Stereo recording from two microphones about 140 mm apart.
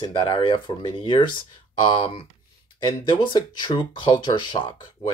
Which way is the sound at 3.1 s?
35° left (ahead or behind).